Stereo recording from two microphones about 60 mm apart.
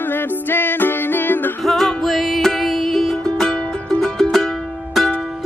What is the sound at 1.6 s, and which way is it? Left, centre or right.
Music, centre.